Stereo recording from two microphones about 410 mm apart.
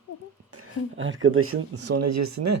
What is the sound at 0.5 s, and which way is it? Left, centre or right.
Speech, right.